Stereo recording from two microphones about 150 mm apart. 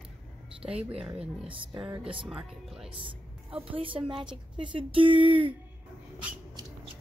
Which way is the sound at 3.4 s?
35° right (ahead or behind).